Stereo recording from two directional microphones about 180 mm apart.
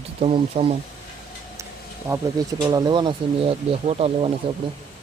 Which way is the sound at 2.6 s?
25° right (ahead or behind).